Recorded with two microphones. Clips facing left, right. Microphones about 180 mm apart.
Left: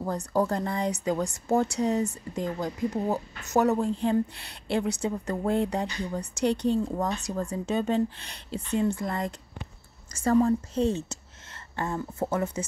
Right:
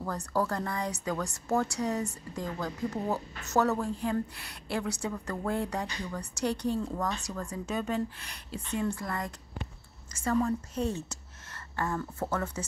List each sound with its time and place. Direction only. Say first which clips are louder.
0.0 s speech: left 4 dB; 20° left (ahead or behind)
10.1 s speech: left 6 dB; 35° left (ahead or behind); by 12.6 s 20° left (ahead or behind)